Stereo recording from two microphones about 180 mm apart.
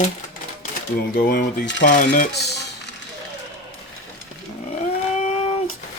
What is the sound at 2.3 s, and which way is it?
Speech, 65° left (ahead or behind).